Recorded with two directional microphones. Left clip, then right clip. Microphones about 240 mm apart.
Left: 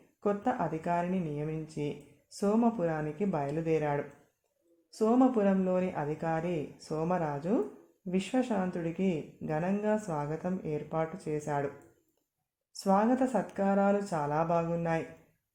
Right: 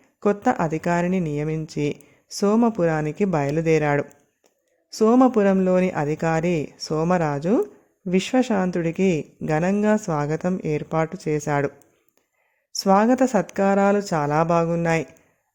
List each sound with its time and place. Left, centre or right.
0.2 s speech: right
12.7 s speech: right